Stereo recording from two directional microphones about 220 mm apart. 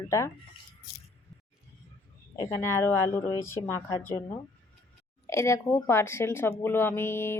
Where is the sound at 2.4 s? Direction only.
15° left (ahead or behind).